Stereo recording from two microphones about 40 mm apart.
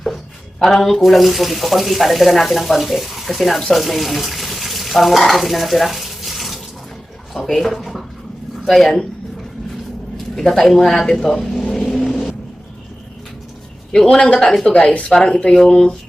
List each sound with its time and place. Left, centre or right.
0.6 s speech: centre
3.7 s water: centre
7.6 s speech: centre
10.3 s speech: centre
11.7 s vehicle: centre
13.9 s speech: centre
15.2 s speech: left
15.5 s speech: centre